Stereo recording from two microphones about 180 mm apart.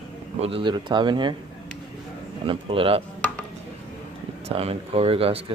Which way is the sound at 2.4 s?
30° right (ahead or behind).